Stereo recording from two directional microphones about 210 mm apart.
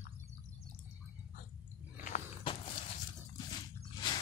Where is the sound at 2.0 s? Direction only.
35° left (ahead or behind).